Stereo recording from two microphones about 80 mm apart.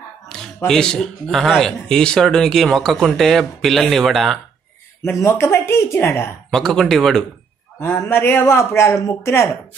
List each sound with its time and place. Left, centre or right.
0.3 s a sound: centre
0.7 s speech: centre
5.2 s a woman's voice: left
6.5 s speech: centre
7.8 s a woman's voice: left